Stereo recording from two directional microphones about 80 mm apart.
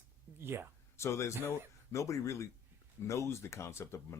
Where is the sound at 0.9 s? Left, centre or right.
Left.